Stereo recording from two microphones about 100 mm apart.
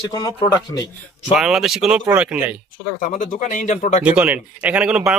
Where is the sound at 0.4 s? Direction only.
35° left (ahead or behind).